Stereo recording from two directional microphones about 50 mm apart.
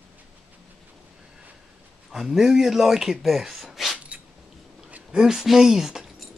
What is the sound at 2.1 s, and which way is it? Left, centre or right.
A man's voice, centre.